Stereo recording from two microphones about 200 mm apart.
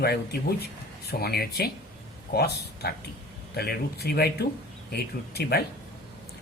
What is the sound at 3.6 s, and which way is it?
Speech, 50° left (ahead or behind).